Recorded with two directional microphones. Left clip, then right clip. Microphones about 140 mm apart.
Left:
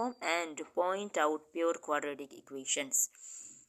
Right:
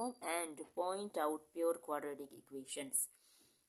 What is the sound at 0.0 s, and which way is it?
Speech, 25° left (ahead or behind).